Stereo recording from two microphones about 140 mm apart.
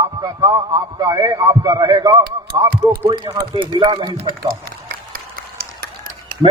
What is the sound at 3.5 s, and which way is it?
Speech, 35° right (ahead or behind).